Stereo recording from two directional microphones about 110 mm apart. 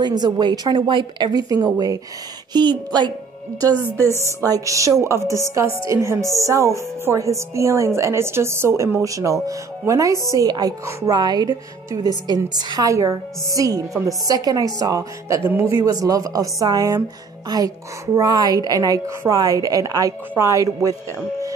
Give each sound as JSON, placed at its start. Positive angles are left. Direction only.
{"t": 0.0, "sound": "a woman's voice", "side_deg": -40}
{"t": 4.0, "sound": "a woman's voice", "side_deg": 25}
{"t": 4.4, "sound": "a woman's voice", "side_deg": -30}
{"t": 10.1, "sound": "speech", "side_deg": 35}
{"t": 10.4, "sound": "a woman's voice", "side_deg": -35}
{"t": 11.1, "sound": "a woman's voice", "side_deg": -40}